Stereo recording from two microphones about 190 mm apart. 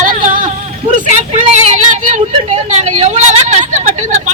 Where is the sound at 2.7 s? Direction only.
35° right (ahead or behind).